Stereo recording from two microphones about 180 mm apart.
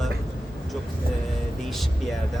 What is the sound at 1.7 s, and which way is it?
Speech, centre (ahead or behind).